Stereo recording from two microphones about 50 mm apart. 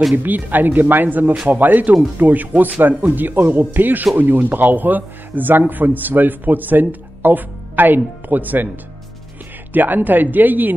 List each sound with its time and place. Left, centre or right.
0.1 s a man's voice: right
9.7 s a man's voice: right